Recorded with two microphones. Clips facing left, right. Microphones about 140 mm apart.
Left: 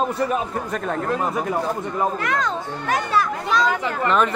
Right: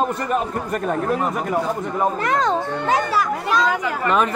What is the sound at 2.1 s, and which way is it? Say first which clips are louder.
Speech: right 4 dB; 35° right (ahead or behind).